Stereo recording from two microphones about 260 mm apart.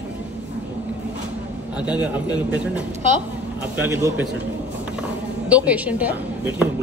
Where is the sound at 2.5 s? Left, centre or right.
Centre.